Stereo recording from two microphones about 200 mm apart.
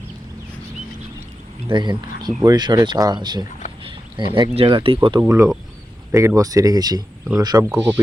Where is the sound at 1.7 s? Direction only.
25° right (ahead or behind).